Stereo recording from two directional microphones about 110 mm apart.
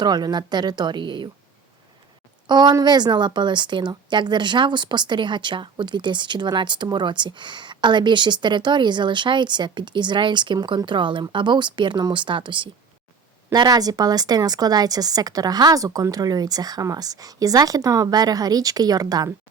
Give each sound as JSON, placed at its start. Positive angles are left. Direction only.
{"t": 0.0, "sound": "a woman's voice", "side_deg": -40}
{"t": 2.5, "sound": "a woman's voice", "side_deg": -40}
{"t": 13.5, "sound": "a woman's voice", "side_deg": -35}